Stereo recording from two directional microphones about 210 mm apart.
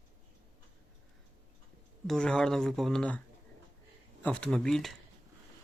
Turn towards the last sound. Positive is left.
turn(degrees=0)  # may be behind; listen again after turning